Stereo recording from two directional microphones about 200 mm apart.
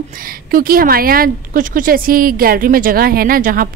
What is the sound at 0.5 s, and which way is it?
A woman's voice, 45° right (ahead or behind).